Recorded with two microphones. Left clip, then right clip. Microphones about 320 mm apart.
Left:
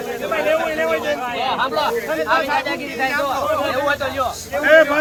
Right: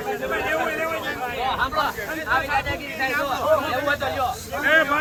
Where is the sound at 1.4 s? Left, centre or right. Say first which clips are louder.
Left 3 dB; centre.